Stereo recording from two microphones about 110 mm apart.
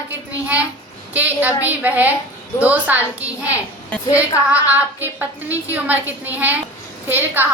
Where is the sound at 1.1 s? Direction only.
15° right (ahead or behind).